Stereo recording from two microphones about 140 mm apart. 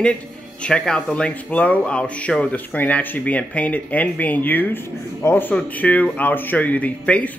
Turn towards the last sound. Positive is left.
turn(degrees=10)  # may be behind; listen again after turning